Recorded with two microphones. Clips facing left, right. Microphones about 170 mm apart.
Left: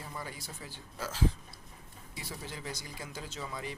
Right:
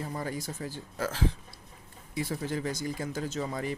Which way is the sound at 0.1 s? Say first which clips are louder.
Right 8 dB; 45° right (ahead or behind).